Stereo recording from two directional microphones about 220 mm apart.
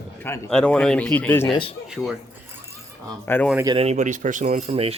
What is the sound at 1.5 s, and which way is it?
Speech, 25° left (ahead or behind).